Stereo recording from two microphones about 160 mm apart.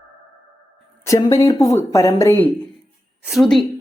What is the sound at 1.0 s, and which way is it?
Speech, 20° left (ahead or behind).